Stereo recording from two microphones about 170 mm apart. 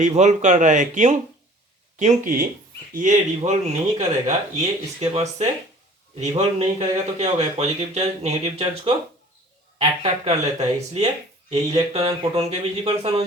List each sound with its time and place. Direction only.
0.0 s speech: 45° right (ahead or behind)